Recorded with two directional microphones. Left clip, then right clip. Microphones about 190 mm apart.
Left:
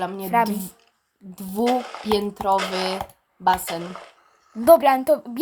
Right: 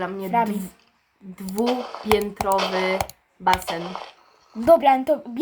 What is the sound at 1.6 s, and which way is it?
A child's voice, 15° left (ahead or behind).